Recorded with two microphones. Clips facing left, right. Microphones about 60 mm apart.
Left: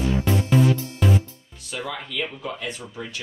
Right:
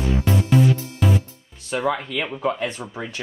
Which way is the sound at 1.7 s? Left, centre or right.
Right.